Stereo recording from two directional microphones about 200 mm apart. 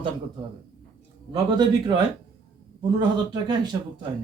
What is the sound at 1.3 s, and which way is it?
Speech, 20° right (ahead or behind).